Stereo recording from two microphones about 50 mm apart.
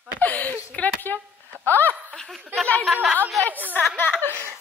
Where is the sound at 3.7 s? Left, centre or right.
Left.